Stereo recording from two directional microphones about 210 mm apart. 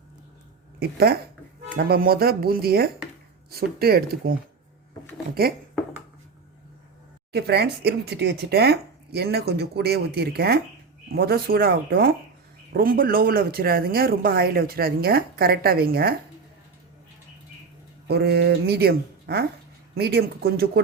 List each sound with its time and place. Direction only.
0.8 s speech: 45° right (ahead or behind)
7.3 s speech: 50° right (ahead or behind)
18.1 s speech: 50° right (ahead or behind)